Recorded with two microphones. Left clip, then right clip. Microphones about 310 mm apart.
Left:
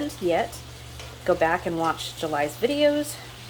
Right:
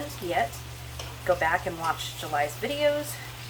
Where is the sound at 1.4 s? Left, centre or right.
Left.